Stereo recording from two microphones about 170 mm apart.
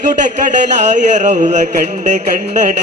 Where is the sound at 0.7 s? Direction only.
45° right (ahead or behind).